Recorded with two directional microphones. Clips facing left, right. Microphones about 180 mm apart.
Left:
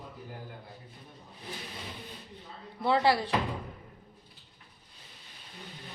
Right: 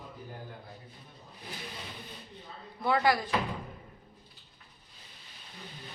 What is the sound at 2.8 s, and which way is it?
Speech, 30° left (ahead or behind).